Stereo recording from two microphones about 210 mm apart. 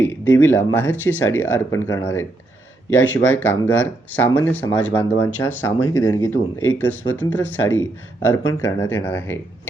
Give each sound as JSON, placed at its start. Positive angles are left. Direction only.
{"t": 0.0, "sound": "speech", "side_deg": 10}